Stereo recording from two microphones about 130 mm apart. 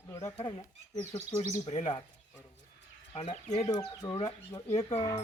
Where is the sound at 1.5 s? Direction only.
60° left (ahead or behind).